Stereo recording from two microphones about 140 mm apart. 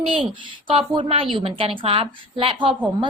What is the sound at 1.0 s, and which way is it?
A woman's voice, 40° right (ahead or behind).